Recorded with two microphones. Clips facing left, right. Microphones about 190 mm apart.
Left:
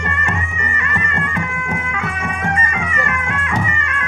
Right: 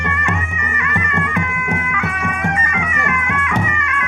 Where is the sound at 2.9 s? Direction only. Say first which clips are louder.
Right 1 dB; 30° left (ahead or behind).